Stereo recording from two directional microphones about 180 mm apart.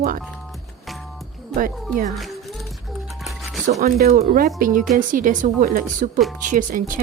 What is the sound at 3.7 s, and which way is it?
A woman's voice, 40° right (ahead or behind).